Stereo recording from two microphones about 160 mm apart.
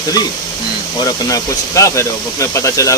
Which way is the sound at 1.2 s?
20° left (ahead or behind).